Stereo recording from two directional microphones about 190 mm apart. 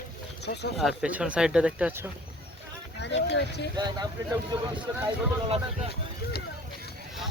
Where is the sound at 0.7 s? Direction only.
5° right (ahead or behind).